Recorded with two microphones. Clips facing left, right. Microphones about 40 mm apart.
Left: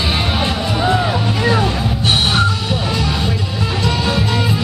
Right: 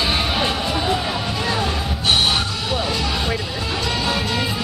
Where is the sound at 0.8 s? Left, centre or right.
Left.